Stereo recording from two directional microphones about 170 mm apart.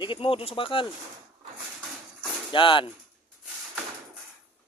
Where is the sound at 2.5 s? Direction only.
30° left (ahead or behind).